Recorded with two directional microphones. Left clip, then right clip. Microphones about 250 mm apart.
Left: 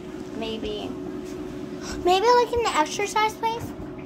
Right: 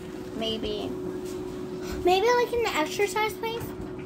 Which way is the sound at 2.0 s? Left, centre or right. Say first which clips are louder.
Left 4 dB; left.